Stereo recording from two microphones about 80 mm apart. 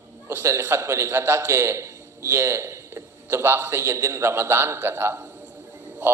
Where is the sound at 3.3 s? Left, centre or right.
Right.